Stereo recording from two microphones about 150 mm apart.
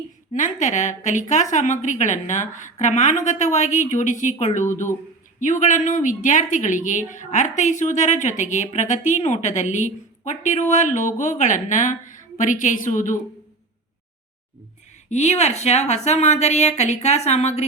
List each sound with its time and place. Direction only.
0.3 s a woman's voice: 55° left (ahead or behind)
15.1 s a woman's voice: 50° left (ahead or behind)